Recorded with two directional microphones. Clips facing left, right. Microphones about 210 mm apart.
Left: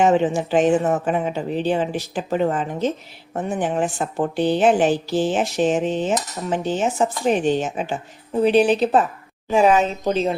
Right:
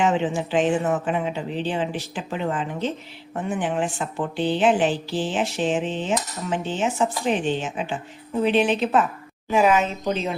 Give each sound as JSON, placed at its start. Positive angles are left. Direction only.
{"t": 0.0, "sound": "a woman's voice", "side_deg": 40}